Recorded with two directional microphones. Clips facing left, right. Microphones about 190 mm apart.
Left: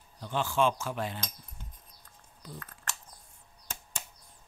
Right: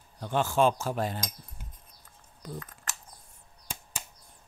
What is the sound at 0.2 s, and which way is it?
Cutlery, 45° right (ahead or behind).